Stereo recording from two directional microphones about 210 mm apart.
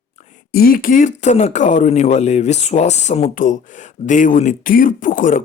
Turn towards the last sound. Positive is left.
turn(degrees=40)  # may be behind; listen again after turning